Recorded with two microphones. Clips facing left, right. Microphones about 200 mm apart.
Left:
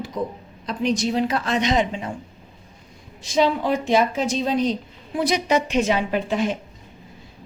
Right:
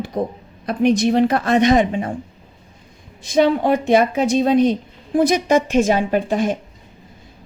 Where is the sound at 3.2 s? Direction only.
55° right (ahead or behind).